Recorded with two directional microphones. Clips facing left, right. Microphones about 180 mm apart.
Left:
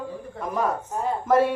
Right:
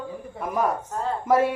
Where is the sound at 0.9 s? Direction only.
10° left (ahead or behind).